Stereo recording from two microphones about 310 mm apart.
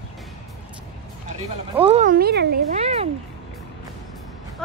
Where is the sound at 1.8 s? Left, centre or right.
Right.